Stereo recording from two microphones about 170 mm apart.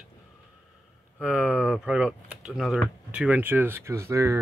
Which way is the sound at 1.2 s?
5° right (ahead or behind).